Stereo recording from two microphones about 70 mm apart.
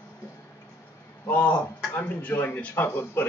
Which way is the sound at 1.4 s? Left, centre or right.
Centre.